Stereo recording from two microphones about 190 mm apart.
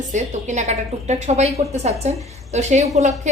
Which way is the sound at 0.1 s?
40° right (ahead or behind).